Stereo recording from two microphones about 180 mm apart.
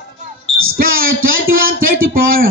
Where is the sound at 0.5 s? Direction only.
55° right (ahead or behind).